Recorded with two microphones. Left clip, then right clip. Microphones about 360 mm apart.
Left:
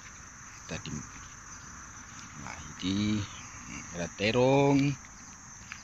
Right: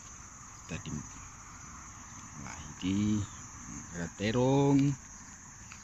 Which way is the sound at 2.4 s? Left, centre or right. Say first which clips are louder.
Left 2 dB; centre.